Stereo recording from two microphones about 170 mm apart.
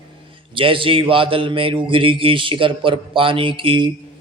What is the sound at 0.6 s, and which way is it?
Speech, 30° right (ahead or behind).